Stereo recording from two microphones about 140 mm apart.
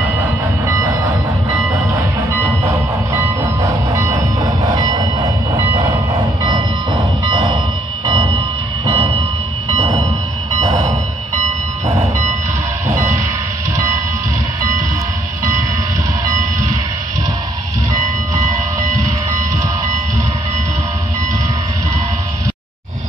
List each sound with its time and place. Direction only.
0.7 s train: 20° right (ahead or behind)
2.3 s train: 20° right (ahead or behind); by 7.6 s 35° right (ahead or behind)
8.1 s a sound: 35° right (ahead or behind)
8.8 s train: 35° right (ahead or behind)
9.8 s train: 45° right (ahead or behind)
10.6 s a sound: 25° right (ahead or behind)
12.8 s train: 20° right (ahead or behind)
13.7 s vehicle: 25° right (ahead or behind)
18.0 s train: 60° right (ahead or behind)